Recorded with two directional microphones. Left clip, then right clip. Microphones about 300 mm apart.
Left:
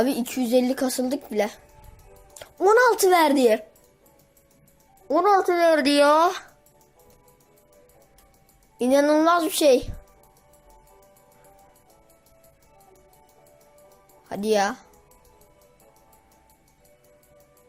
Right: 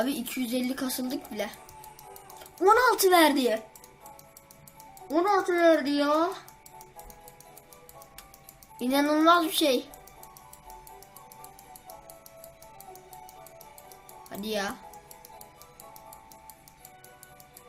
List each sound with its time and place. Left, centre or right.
0.0 s speech: left
2.6 s speech: centre
5.0 s speech: left
8.8 s speech: left
14.3 s speech: left